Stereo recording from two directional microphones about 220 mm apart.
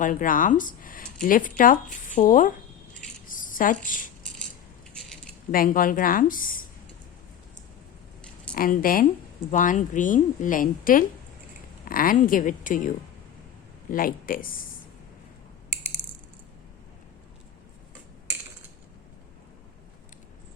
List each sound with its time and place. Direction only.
0.0 s speech: 35° left (ahead or behind)
3.2 s a sound: 40° left (ahead or behind)
4.9 s keys jangling: centre (ahead or behind)
5.5 s a woman's voice: 40° left (ahead or behind)
8.5 s a woman's voice: 40° left (ahead or behind)
13.9 s a woman's voice: 40° left (ahead or behind)